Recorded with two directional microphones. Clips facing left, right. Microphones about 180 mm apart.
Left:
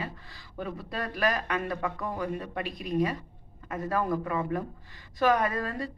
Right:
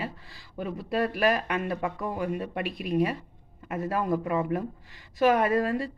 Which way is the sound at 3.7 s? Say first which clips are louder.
Right 1 dB; 25° right (ahead or behind).